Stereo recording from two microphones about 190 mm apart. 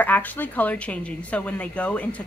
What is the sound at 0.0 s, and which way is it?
Speech, 10° left (ahead or behind).